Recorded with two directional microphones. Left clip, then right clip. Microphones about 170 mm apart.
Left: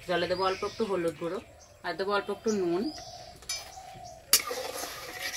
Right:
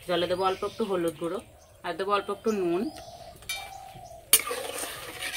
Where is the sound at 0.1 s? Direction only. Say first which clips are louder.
Right 2 dB; 5° left (ahead or behind).